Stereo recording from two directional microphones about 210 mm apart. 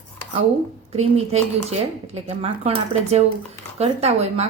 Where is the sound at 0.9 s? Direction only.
30° right (ahead or behind).